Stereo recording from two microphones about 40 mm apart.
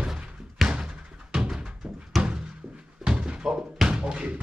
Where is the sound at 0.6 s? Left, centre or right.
Right.